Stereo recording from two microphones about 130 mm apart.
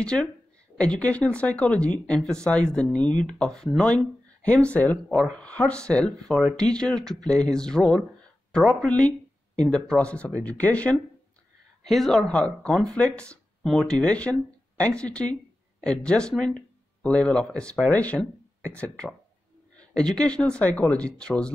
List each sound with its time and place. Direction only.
0.0 s speech: 5° left (ahead or behind)
11.8 s speech: centre (ahead or behind)